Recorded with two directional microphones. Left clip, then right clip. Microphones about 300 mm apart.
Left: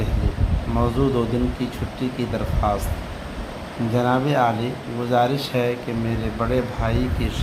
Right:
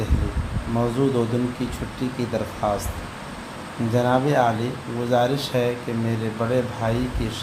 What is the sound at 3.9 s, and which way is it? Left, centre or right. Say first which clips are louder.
Speech: even; centre.